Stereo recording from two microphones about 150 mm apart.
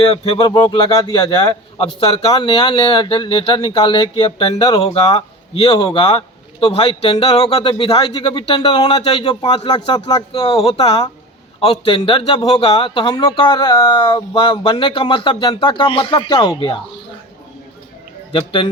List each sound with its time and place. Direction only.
0.1 s speech: 35° left (ahead or behind)
10.6 s speech: 40° left (ahead or behind)
18.3 s speech: 35° left (ahead or behind)